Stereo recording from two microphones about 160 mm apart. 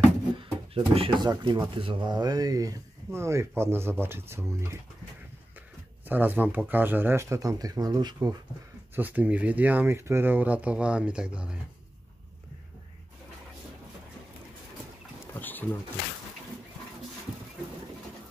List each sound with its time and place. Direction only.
0.4 s a sound: 35° right (ahead or behind)
1.3 s speech: 30° right (ahead or behind)
6.0 s speech: 10° right (ahead or behind)
8.9 s speech: 10° right (ahead or behind)
15.3 s pigeon: 10° left (ahead or behind)